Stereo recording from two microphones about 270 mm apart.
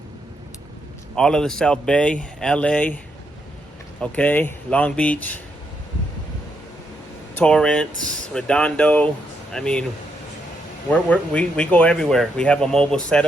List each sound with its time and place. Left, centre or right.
1.1 s speech: centre
4.0 s speech: centre
7.3 s speech: centre
10.8 s speech: centre